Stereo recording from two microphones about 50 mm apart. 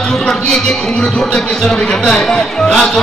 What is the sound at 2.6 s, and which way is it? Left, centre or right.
Speech, centre.